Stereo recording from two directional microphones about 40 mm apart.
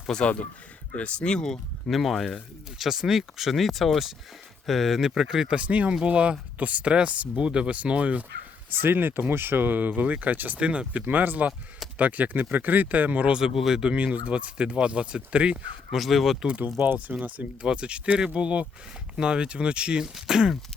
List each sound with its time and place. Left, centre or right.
0.1 s speech: centre
1.9 s speech: centre
5.5 s speech: right
8.8 s speech: right
10.6 s speech: right
11.0 s speech: right
13.4 s speech: centre
13.8 s speech: right
15.9 s speech: centre
17.1 s speech: right
17.6 s speech: right
20.1 s speech: centre